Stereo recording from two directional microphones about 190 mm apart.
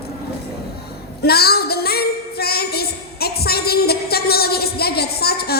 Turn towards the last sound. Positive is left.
turn(degrees=55)  # may be behind; listen again after turning